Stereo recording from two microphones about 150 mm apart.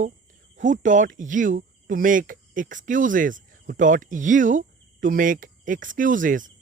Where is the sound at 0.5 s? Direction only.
55° right (ahead or behind).